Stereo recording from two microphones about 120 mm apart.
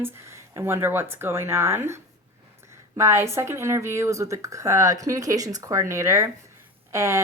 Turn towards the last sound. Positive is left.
turn(degrees=-25)  # may be behind; listen again after turning